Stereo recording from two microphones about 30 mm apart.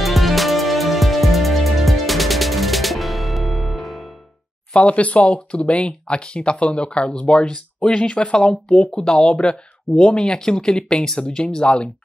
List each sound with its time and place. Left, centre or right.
0.0 s music: centre
4.7 s speech: left